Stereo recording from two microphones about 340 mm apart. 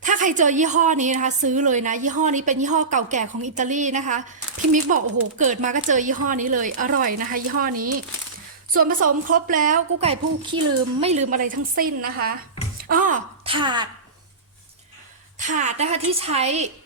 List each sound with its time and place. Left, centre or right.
0.0 s a woman's voice: right
9.0 s a woman's voice: right
9.3 s a woman's voice: right
15.4 s a woman's voice: right